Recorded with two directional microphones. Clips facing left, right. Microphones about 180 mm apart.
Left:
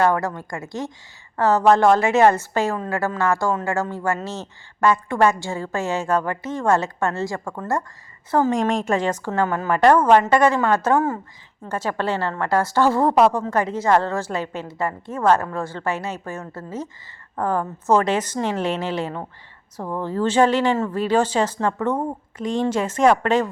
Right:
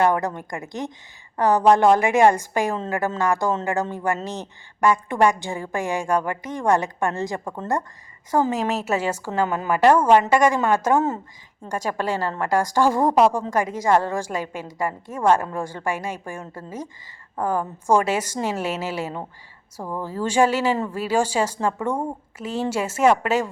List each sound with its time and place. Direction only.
0.0 s a woman's voice: 20° right (ahead or behind)
8.3 s a woman's voice: 10° right (ahead or behind)